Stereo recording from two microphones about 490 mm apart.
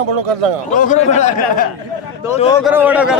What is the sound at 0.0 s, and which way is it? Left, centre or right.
Speech, right.